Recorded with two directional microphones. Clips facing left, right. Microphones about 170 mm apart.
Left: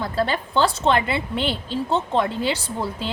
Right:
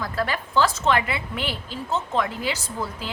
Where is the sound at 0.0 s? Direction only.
30° left (ahead or behind).